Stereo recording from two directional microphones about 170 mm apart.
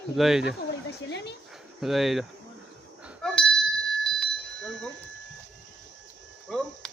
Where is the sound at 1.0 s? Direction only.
90° left.